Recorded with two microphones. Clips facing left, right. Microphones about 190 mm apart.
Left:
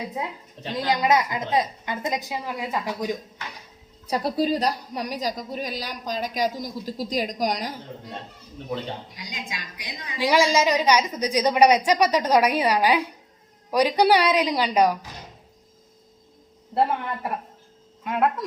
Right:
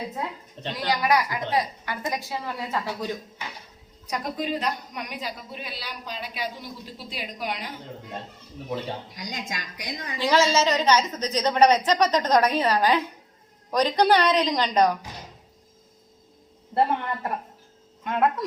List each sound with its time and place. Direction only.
0.1 s a woman's voice: 10° left (ahead or behind)
0.7 s a woman's voice: 20° left (ahead or behind)
4.0 s a woman's voice: 35° left (ahead or behind)
9.1 s a woman's voice: 45° right (ahead or behind)
10.2 s a woman's voice: 10° left (ahead or behind)
18.0 s speech: 5° left (ahead or behind)